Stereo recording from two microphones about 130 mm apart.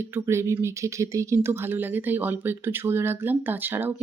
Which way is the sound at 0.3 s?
20° right (ahead or behind).